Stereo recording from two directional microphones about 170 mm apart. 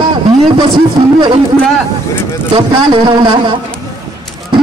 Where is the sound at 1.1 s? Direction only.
25° right (ahead or behind).